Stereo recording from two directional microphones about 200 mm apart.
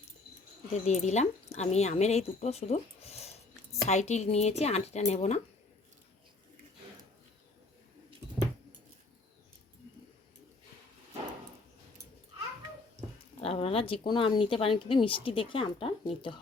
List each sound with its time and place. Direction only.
0.7 s a woman's voice: 35° left (ahead or behind)
13.4 s speech: 30° left (ahead or behind)